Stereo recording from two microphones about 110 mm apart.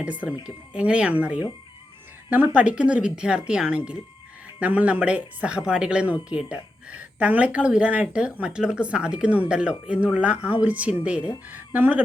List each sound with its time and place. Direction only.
0.0 s speech: 10° right (ahead or behind)